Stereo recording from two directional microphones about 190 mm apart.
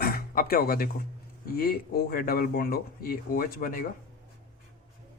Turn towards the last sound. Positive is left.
turn(degrees=50)  # may be behind; listen again after turning